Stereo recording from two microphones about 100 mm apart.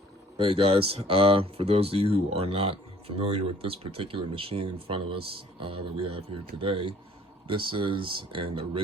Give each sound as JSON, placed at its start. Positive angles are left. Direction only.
{"t": 0.3, "sound": "speech", "side_deg": -70}